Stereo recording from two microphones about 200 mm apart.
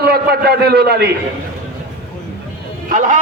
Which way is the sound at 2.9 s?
40° right (ahead or behind).